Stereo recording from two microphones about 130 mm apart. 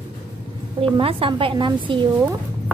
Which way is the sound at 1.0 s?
45° right (ahead or behind).